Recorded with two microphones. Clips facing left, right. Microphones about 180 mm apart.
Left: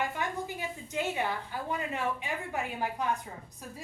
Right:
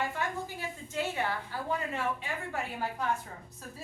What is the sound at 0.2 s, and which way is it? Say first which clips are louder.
A woman's voice: left 1 dB; 15° left (ahead or behind).